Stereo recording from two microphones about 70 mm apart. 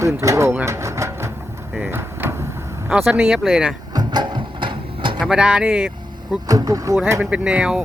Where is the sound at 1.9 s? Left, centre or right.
Right.